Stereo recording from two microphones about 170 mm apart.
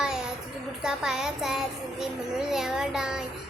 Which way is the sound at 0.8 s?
5° right (ahead or behind).